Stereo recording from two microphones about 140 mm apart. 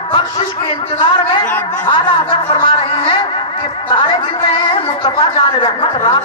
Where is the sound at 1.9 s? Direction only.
35° left (ahead or behind).